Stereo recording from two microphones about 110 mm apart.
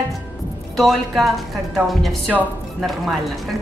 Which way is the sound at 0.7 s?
Centre (ahead or behind).